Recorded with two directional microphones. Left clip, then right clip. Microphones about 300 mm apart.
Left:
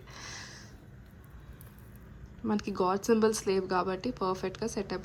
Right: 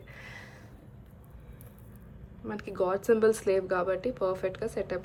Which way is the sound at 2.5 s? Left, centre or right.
Centre.